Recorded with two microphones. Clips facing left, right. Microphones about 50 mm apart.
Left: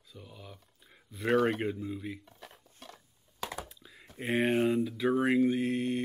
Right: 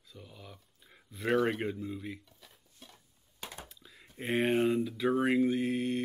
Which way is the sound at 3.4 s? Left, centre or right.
Left.